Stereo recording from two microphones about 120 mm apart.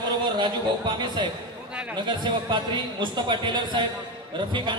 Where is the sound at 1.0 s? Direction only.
40° right (ahead or behind).